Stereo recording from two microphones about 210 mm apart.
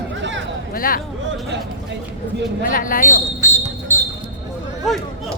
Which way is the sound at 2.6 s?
40° left (ahead or behind).